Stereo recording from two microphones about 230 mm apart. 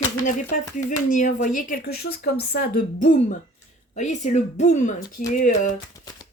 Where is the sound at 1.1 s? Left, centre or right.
Left.